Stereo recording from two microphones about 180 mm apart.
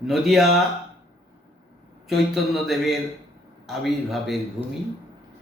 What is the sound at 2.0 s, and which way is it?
A man's voice, centre (ahead or behind).